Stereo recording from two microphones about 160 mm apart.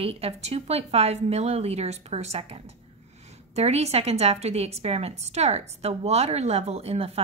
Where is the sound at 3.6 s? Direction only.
40° right (ahead or behind).